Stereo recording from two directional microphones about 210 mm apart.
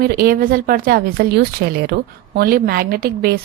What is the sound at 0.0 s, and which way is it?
A woman's voice, 45° right (ahead or behind).